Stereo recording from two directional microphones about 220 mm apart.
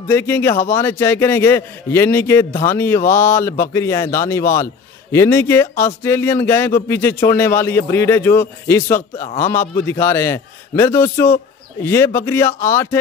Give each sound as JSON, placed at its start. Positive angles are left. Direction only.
{"t": 0.1, "sound": "a man's voice", "side_deg": 10}